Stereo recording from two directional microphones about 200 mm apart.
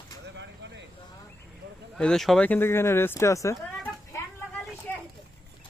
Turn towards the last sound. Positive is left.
turn(degrees=10)  # may be behind; listen again after turning